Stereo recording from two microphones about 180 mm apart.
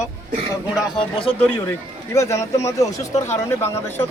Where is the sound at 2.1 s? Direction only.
15° left (ahead or behind).